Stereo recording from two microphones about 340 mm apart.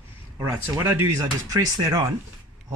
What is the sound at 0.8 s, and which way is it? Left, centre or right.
Speech, centre.